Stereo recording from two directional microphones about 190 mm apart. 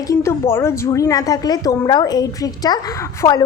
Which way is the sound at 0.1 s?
15° left (ahead or behind).